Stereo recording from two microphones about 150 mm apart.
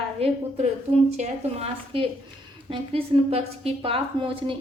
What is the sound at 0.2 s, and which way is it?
Speech, 40° right (ahead or behind).